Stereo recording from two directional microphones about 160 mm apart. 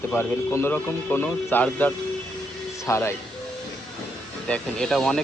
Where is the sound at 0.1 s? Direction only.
15° left (ahead or behind).